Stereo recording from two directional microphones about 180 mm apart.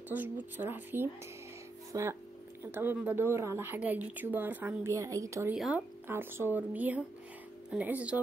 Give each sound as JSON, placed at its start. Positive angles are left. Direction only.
{"t": 0.1, "sound": "a woman's voice", "side_deg": -10}
{"t": 5.5, "sound": "a woman's voice", "side_deg": -5}